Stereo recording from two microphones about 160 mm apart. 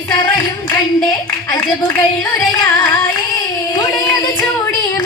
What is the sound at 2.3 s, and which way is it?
Music, 15° left (ahead or behind).